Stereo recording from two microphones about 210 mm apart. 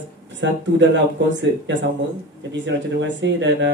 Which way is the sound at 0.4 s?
60° right (ahead or behind).